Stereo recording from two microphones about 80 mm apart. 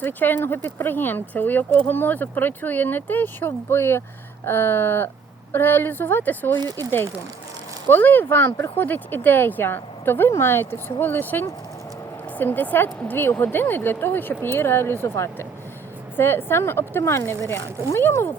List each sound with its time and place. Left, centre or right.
0.0 s speech: left